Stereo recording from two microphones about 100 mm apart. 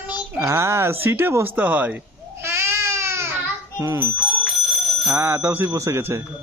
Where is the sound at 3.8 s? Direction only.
25° right (ahead or behind).